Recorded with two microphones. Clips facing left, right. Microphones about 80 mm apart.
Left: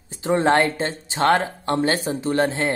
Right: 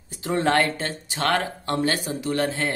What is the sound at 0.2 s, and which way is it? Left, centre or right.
Speech, left.